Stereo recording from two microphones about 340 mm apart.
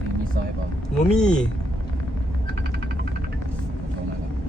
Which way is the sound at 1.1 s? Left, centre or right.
Centre.